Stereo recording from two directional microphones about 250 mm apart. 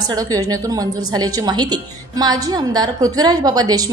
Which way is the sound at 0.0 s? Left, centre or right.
Centre.